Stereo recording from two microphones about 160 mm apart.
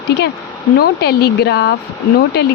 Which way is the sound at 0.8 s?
85° left.